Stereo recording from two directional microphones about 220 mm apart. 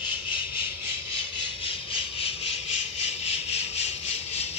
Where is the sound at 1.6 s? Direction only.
25° left (ahead or behind).